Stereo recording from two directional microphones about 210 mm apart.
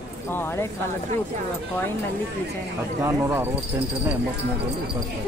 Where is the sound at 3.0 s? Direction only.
10° right (ahead or behind).